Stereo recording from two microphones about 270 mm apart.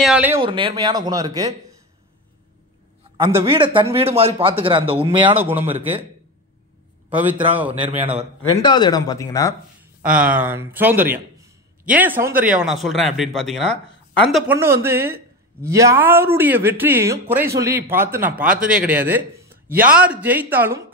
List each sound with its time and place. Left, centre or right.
0.0 s speech: centre
0.4 s speech: centre
3.2 s speech: centre
5.4 s speech: centre
7.1 s a man's voice: centre
8.5 s speech: centre
10.2 s a man's voice: centre
19.5 s a sound: right
19.9 s speech: centre